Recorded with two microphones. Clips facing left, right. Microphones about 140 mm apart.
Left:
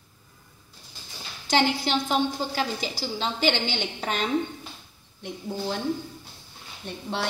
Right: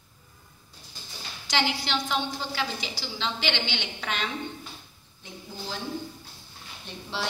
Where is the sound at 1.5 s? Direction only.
45° left (ahead or behind).